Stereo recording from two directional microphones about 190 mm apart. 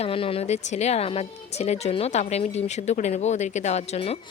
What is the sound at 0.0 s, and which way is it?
Speech, 30° left (ahead or behind).